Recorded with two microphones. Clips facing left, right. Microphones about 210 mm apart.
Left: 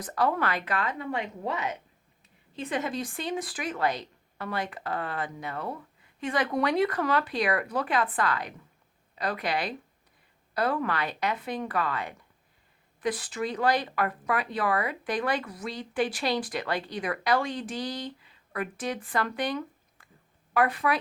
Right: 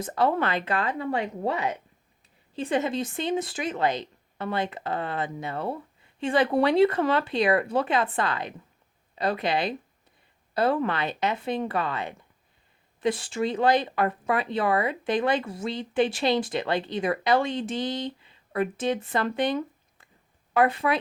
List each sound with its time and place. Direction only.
0.0 s speech: 25° right (ahead or behind)